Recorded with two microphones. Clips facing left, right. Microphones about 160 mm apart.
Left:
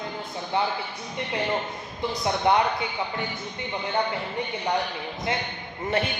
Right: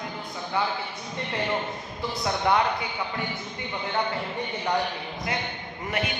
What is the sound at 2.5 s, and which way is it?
Speech, 25° left (ahead or behind).